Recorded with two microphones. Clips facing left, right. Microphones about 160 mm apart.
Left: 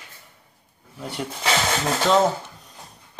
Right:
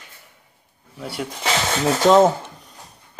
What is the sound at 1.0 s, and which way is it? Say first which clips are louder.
Speech: right 2 dB; 5° right (ahead or behind).